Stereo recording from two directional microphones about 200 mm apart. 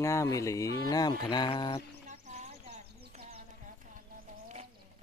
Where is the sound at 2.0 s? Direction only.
35° right (ahead or behind).